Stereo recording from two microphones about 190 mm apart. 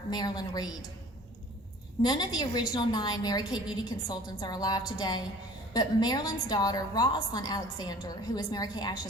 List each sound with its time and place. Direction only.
0.1 s a woman's voice: 20° left (ahead or behind)
2.0 s a woman's voice: 20° left (ahead or behind)